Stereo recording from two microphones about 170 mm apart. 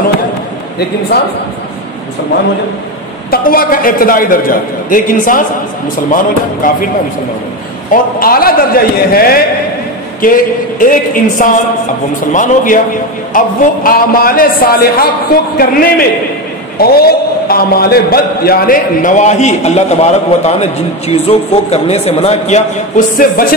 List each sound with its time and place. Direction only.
0.7 s a man's voice: 70° left (ahead or behind)
3.3 s a man's voice: 60° left (ahead or behind)
7.9 s a man's voice: 60° left (ahead or behind)